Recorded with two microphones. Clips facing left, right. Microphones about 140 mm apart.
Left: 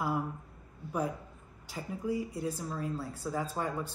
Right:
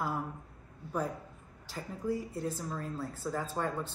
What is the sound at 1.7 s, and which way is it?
A woman's voice, 5° left (ahead or behind).